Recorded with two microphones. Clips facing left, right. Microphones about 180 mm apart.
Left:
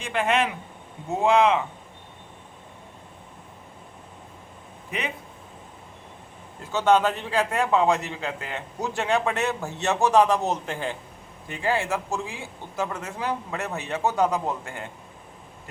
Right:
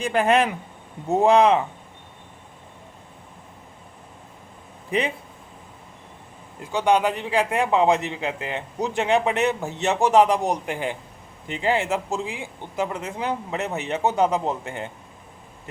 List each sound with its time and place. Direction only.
0.0 s speech: 35° right (ahead or behind)
4.9 s speech: 30° right (ahead or behind)
6.7 s a man's voice: 15° right (ahead or behind)